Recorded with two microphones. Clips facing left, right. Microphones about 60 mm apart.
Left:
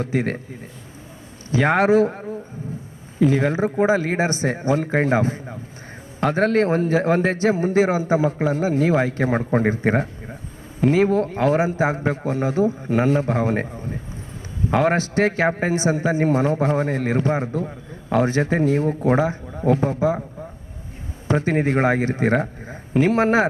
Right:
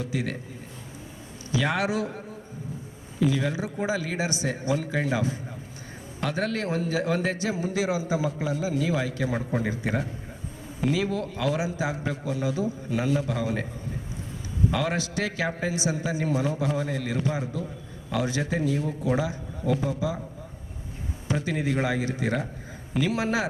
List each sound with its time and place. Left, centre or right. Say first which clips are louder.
0.0 s a man's voice: left 7 dB; left
1.5 s a man's voice: left 9 dB; left
21.2 s a man's voice: left 8 dB; left